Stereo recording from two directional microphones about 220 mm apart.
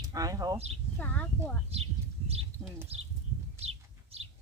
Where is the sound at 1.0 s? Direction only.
5° left (ahead or behind).